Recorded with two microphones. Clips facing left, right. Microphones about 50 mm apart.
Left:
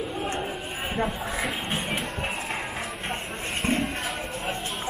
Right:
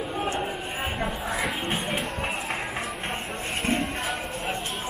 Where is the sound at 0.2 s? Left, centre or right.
Centre.